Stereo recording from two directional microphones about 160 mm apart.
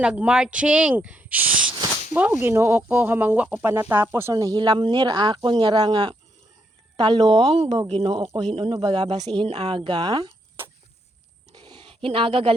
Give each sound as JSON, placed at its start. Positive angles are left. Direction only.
{"t": 0.0, "sound": "speech", "side_deg": -5}
{"t": 4.4, "sound": "speech", "side_deg": -25}
{"t": 7.4, "sound": "speech", "side_deg": -35}
{"t": 9.8, "sound": "speech", "side_deg": -25}
{"t": 11.5, "sound": "a sound", "side_deg": -25}